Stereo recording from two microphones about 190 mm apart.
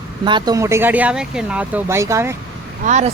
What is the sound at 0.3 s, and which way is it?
Speech, 20° right (ahead or behind).